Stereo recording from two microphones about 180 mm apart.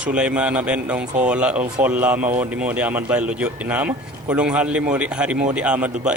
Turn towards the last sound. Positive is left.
turn(degrees=-5)  # may be behind; listen again after turning